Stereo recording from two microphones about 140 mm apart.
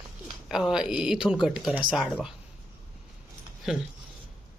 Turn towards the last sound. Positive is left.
turn(degrees=0)  # may be behind; listen again after turning